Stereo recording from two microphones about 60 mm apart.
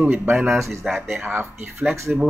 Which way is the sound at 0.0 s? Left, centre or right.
Right.